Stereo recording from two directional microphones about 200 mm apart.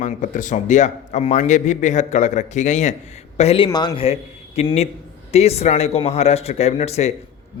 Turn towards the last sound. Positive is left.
turn(degrees=35)  # may be behind; listen again after turning